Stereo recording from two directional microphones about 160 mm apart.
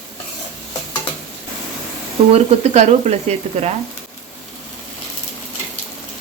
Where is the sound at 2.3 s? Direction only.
45° right (ahead or behind).